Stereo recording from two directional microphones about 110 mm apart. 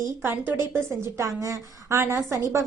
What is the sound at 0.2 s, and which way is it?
A woman's voice, 20° right (ahead or behind).